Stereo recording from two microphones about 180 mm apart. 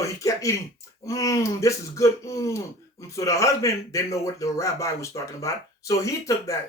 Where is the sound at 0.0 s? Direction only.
15° left (ahead or behind).